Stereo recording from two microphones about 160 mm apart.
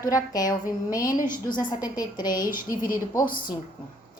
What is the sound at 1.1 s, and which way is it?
Speech, 55° left (ahead or behind).